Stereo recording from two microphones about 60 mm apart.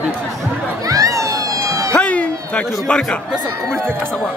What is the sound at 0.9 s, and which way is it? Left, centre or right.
Police car, right.